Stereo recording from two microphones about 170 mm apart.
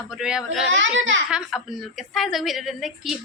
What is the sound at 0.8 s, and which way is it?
Speech, 90° right.